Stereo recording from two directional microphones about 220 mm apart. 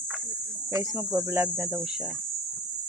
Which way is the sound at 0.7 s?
15° right (ahead or behind).